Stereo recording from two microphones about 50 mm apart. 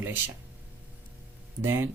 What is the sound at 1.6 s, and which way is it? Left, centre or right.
Speech, right.